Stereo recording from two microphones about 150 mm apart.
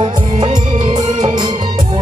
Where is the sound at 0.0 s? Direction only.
50° right (ahead or behind).